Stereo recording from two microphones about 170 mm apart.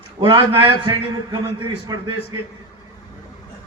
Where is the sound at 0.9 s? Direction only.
25° right (ahead or behind).